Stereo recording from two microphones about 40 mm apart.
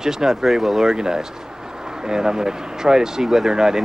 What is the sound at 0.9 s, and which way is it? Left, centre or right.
Speech, centre.